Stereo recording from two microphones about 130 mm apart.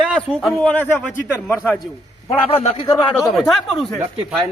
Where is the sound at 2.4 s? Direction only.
45° left (ahead or behind).